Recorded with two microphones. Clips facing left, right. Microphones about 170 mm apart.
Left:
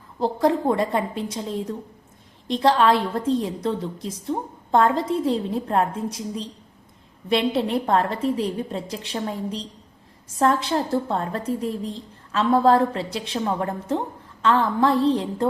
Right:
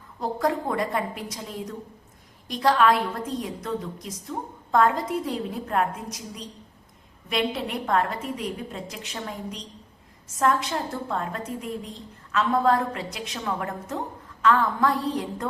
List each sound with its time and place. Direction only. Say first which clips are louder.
0.2 s a woman's voice: left 5 dB; 30° left (ahead or behind)